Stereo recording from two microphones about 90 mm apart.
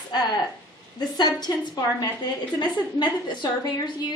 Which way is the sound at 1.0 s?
50° left (ahead or behind).